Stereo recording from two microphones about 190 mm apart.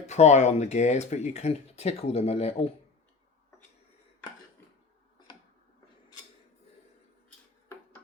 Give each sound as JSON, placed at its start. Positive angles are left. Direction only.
{"t": 0.0, "sound": "speech", "side_deg": 35}